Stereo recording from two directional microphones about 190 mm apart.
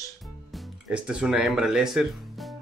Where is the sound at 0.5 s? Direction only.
5° right (ahead or behind).